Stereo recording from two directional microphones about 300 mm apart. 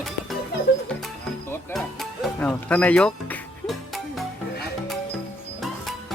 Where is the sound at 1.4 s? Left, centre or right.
Centre.